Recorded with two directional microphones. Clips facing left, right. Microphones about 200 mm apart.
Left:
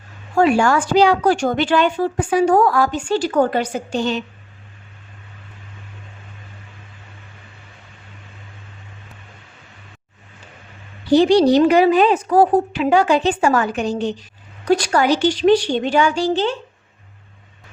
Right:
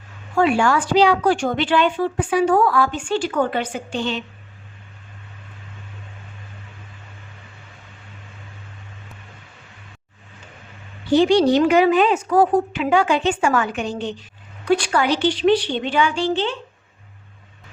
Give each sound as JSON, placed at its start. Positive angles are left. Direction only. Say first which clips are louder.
{"t": 0.3, "sound": "speech", "louder": "left 2 dB", "side_deg": 40}
{"t": 11.1, "sound": "speech", "louder": "left 2 dB", "side_deg": 35}